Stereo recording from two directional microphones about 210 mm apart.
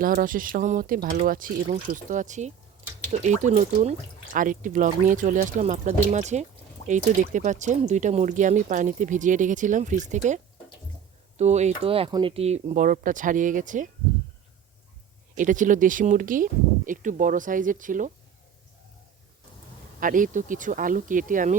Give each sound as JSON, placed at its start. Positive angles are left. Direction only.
{"t": 0.0, "sound": "speech", "side_deg": -40}
{"t": 15.4, "sound": "speech", "side_deg": -35}
{"t": 20.0, "sound": "speech", "side_deg": -40}